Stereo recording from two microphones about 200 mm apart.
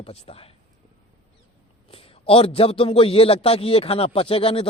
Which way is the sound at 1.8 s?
30° left (ahead or behind).